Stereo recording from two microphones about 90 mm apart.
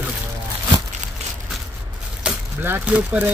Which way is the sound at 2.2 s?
10° right (ahead or behind).